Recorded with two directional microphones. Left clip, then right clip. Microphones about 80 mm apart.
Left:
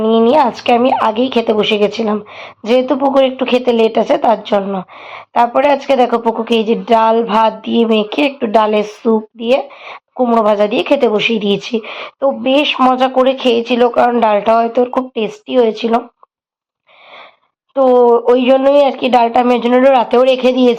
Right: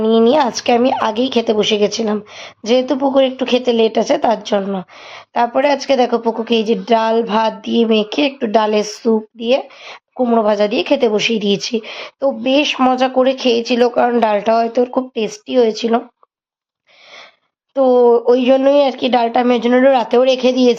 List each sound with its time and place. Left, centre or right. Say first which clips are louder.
0.0 s a woman's voice: left 2 dB; centre
4.6 s a woman's voice: left 2 dB; right
5.0 s a woman's voice: left 4 dB; centre
17.7 s speech: left 2 dB; centre